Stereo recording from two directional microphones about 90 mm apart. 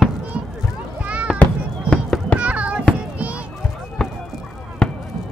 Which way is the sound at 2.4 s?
15° right (ahead or behind).